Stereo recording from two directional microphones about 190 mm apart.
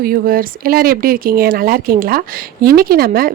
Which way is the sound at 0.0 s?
50° right (ahead or behind).